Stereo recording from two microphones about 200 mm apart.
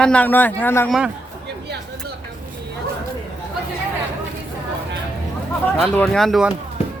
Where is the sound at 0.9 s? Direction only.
5° right (ahead or behind).